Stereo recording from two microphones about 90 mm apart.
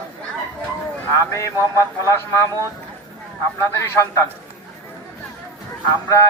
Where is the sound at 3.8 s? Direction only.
30° left (ahead or behind).